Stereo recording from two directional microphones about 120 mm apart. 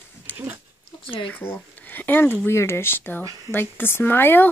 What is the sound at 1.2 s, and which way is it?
Speech, 15° left (ahead or behind).